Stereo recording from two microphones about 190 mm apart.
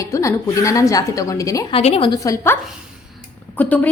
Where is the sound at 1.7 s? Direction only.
30° left (ahead or behind); by 2.5 s 15° left (ahead or behind).